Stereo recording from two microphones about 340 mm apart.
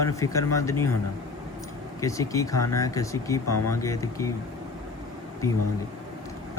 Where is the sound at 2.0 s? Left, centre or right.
Centre.